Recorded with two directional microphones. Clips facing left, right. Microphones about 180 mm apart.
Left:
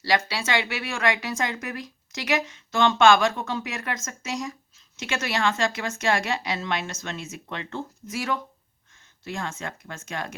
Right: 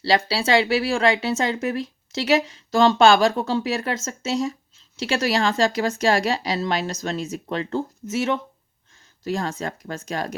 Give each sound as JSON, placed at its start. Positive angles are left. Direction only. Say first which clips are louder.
{"t": 0.0, "sound": "speech", "louder": "right 4 dB", "side_deg": -30}
{"t": 8.1, "sound": "speech", "louder": "right 6 dB", "side_deg": -25}
{"t": 9.2, "sound": "speech", "louder": "right 7 dB", "side_deg": -35}